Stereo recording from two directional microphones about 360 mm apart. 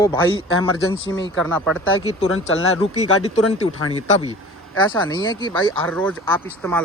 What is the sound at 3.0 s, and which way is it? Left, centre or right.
Speech, centre.